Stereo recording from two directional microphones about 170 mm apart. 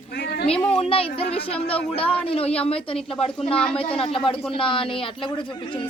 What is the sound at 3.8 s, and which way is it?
Speech, 35° left (ahead or behind).